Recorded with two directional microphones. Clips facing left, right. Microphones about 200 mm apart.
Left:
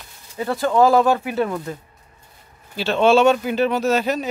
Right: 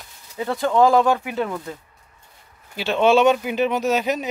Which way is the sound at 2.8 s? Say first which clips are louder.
Left 1 dB; 15° right (ahead or behind).